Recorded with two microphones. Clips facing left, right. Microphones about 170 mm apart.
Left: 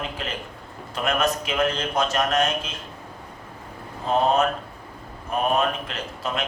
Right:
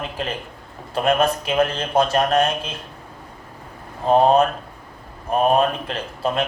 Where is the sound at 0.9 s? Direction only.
55° right (ahead or behind).